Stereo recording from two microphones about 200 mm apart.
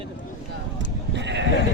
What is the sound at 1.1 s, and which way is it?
Bleat, 60° right (ahead or behind).